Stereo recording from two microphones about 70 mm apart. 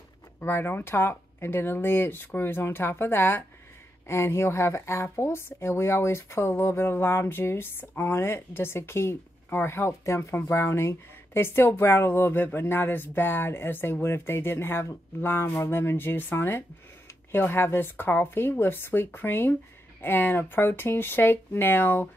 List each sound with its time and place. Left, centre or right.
0.4 s a woman's voice: left